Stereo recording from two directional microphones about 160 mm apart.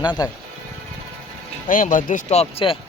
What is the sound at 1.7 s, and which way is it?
Speech, 60° left (ahead or behind).